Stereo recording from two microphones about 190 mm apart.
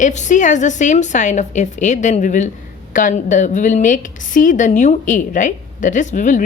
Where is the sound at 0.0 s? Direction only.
40° left (ahead or behind).